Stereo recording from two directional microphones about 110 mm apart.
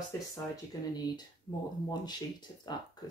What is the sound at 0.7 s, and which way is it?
Speech, 35° left (ahead or behind).